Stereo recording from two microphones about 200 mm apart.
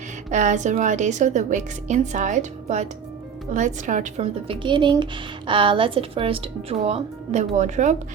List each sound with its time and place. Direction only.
0.3 s a woman's voice: 35° right (ahead or behind)